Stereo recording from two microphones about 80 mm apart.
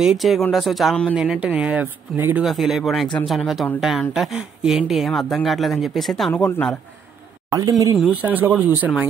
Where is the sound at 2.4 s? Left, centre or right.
Centre.